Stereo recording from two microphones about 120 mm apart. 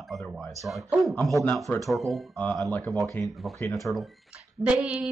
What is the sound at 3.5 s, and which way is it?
Speech, 25° left (ahead or behind).